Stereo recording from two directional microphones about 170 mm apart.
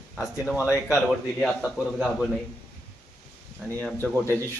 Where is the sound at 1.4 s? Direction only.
Centre (ahead or behind).